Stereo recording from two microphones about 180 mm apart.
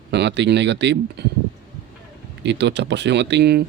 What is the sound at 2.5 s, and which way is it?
Speech, 70° right (ahead or behind).